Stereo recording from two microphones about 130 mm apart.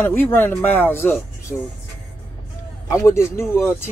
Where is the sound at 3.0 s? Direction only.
20° left (ahead or behind).